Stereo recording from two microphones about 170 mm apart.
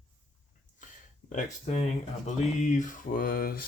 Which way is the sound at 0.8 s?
50° left (ahead or behind).